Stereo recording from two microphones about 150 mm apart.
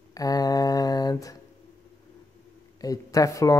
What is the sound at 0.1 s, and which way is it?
Mantra, 25° left (ahead or behind).